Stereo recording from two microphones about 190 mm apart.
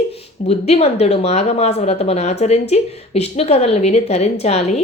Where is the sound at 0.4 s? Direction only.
35° left (ahead or behind).